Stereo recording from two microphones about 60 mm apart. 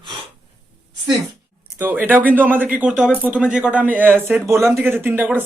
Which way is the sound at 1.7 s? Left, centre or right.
Right.